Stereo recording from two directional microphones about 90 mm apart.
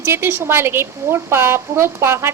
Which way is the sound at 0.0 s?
25° right (ahead or behind).